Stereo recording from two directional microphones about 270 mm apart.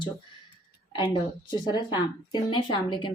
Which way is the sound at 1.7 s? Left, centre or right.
Centre.